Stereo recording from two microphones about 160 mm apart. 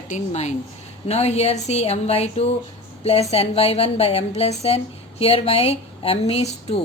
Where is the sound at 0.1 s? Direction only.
45° left (ahead or behind).